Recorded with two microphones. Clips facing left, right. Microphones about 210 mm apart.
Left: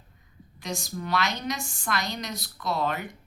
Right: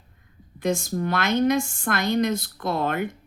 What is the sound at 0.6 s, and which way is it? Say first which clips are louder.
A woman's voice: right 9 dB; 50° right (ahead or behind).